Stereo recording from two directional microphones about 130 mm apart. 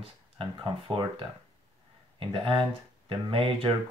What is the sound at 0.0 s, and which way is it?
Speech, 40° right (ahead or behind).